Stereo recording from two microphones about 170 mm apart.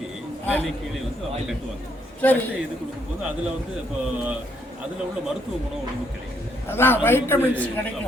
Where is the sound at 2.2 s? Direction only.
10° left (ahead or behind).